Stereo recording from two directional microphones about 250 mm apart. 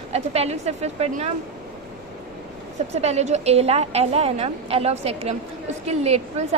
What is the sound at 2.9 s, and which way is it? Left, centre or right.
A woman's voice, right.